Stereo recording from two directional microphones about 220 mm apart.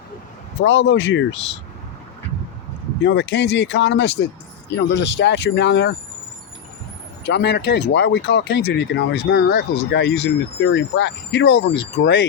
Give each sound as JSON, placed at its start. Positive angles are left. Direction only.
{"t": 0.6, "sound": "speech", "side_deg": 55}
{"t": 3.0, "sound": "speech", "side_deg": 55}
{"t": 7.3, "sound": "speech", "side_deg": 50}